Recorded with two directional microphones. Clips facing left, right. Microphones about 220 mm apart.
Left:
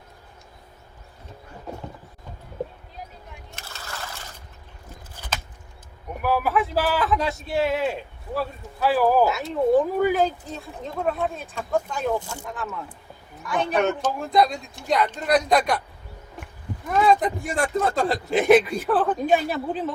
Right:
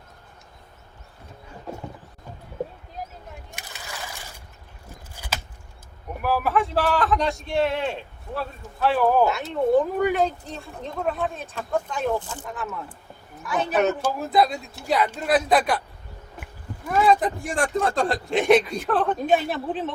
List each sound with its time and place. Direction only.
3.5 s a sound: 15° right (ahead or behind)
6.2 s a man's voice: centre (ahead or behind)
12.5 s a man's voice: centre (ahead or behind)
16.9 s a man's voice: centre (ahead or behind)